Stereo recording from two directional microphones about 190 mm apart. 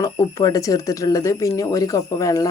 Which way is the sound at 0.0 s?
15° left (ahead or behind).